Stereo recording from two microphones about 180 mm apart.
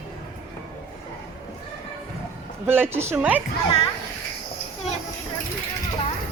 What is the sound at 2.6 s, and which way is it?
Speech, 10° right (ahead or behind).